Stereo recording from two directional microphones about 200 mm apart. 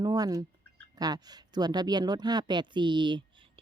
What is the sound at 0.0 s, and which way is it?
Speech, 20° right (ahead or behind).